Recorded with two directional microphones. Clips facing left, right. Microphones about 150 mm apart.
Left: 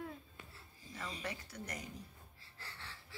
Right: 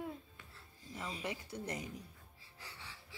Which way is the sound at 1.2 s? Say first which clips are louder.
Right 3 dB; 20° right (ahead or behind).